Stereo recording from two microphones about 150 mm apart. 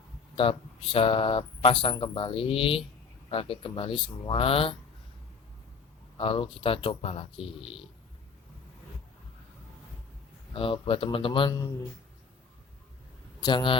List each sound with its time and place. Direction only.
0.3 s speech: 40° left (ahead or behind)
6.1 s speech: 35° left (ahead or behind)
10.5 s speech: 35° left (ahead or behind); by 11.9 s 20° left (ahead or behind)
13.4 s speech: 30° left (ahead or behind)